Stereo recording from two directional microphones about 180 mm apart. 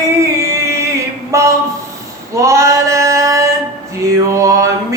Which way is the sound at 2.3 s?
15° right (ahead or behind).